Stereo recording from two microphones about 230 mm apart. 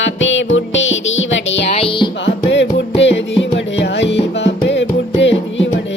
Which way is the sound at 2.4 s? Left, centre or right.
Left.